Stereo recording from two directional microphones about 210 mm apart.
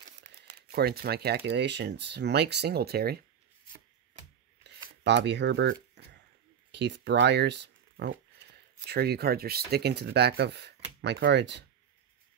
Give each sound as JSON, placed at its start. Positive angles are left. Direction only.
{"t": 0.5, "sound": "speech", "side_deg": -50}
{"t": 4.6, "sound": "a sound", "side_deg": -55}
{"t": 5.0, "sound": "speech", "side_deg": -55}